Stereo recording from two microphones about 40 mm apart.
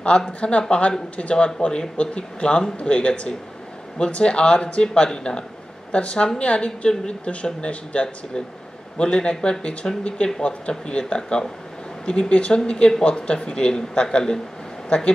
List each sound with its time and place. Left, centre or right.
0.4 s speech: left